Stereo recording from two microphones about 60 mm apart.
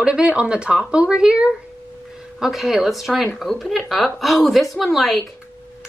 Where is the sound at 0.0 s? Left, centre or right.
Centre.